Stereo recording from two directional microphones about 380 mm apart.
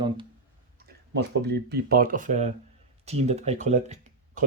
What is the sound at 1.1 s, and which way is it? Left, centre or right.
Speech, right.